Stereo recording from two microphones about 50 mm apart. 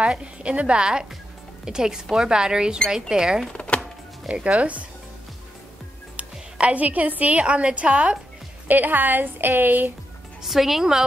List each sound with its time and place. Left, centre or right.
0.1 s a woman's voice: right
3.5 s a sound: left
4.3 s a woman's voice: right
6.1 s a woman's voice: right
8.6 s a woman's voice: right
10.4 s a woman's voice: centre